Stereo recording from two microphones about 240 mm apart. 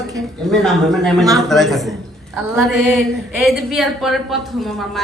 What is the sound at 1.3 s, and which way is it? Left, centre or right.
Speech, centre.